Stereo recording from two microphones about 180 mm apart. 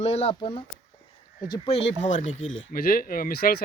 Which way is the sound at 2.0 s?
40° left (ahead or behind).